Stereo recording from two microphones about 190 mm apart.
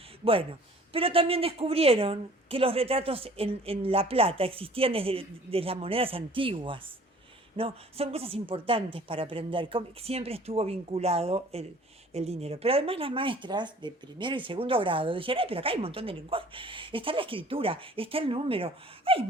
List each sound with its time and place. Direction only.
0.9 s speech: 30° right (ahead or behind)